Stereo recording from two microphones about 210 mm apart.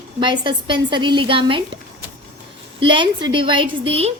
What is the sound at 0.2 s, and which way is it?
A woman's voice, 20° right (ahead or behind).